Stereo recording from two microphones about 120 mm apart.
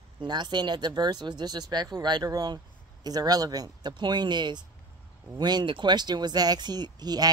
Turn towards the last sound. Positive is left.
turn(degrees=-35)  # may be behind; listen again after turning